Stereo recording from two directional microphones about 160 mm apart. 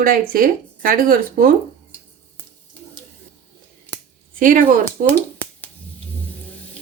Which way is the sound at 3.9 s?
10° left (ahead or behind).